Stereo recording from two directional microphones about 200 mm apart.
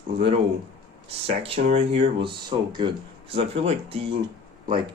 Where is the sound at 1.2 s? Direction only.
30° right (ahead or behind).